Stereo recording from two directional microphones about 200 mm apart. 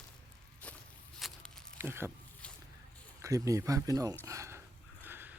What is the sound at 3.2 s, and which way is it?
Speech, 15° right (ahead or behind).